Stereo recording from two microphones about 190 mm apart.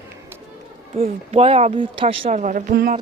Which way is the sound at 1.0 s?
30° right (ahead or behind).